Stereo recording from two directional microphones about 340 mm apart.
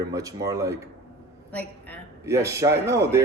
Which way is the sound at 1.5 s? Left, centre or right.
Centre.